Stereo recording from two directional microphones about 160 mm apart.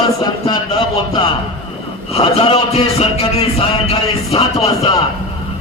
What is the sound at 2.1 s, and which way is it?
A man's voice, 35° left (ahead or behind).